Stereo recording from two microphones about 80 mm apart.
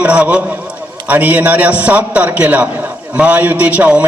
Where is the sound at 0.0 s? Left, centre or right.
Centre.